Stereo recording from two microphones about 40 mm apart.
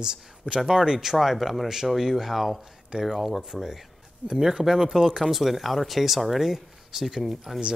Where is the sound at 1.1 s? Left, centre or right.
Centre.